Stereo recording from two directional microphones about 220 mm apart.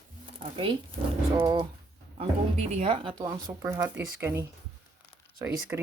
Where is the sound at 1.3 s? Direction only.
20° right (ahead or behind).